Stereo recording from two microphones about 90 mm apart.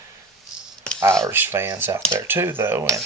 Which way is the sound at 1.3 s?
25° right (ahead or behind).